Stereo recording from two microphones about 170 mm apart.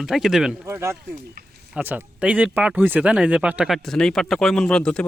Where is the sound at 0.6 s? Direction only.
15° right (ahead or behind); by 5.1 s 5° left (ahead or behind).